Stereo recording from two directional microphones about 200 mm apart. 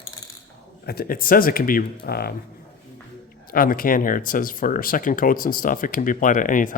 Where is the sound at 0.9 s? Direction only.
50° left (ahead or behind).